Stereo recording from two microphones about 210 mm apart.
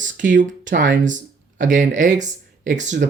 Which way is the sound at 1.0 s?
35° right (ahead or behind).